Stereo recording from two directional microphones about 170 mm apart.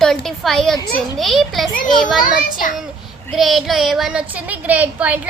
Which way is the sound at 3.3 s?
Centre (ahead or behind).